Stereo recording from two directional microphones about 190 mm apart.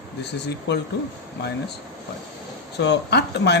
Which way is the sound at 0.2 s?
65° left (ahead or behind).